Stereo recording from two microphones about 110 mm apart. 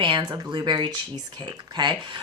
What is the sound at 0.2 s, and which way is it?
A woman's voice, 35° right (ahead or behind).